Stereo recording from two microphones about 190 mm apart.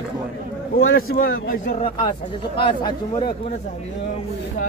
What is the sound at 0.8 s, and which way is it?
Speech, 90° left.